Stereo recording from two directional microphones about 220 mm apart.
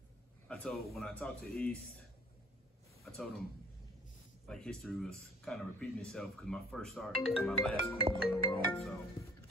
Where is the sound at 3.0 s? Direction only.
Centre (ahead or behind).